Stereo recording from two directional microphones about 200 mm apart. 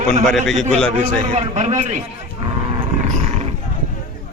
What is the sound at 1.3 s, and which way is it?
Speech, 35° right (ahead or behind).